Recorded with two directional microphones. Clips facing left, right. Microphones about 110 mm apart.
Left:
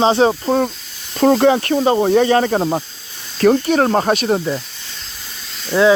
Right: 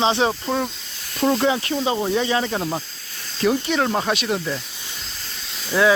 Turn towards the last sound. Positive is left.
turn(degrees=20)  # may be behind; listen again after turning